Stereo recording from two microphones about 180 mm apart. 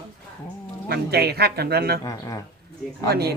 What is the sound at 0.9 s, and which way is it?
Speech, 60° right (ahead or behind).